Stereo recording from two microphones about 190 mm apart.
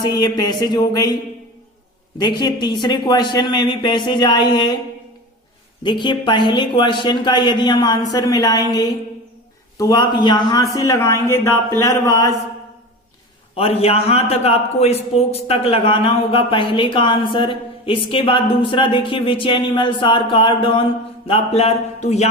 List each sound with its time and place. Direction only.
0.0 s a man's voice: 20° left (ahead or behind)
2.1 s a man's voice: 20° left (ahead or behind)
5.8 s a man's voice: 25° left (ahead or behind)
13.6 s a man's voice: 30° left (ahead or behind)